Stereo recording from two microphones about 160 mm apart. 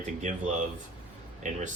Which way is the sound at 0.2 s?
50° right (ahead or behind).